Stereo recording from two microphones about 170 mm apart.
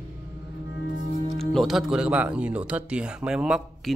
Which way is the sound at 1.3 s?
Centre (ahead or behind).